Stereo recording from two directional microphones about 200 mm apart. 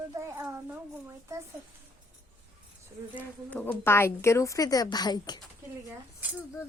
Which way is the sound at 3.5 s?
5° left (ahead or behind).